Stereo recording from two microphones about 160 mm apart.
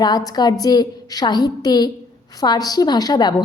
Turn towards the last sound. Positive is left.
turn(degrees=25)  # may be behind; listen again after turning